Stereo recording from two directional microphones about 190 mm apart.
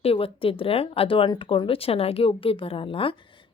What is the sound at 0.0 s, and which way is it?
A woman's voice, 30° left (ahead or behind).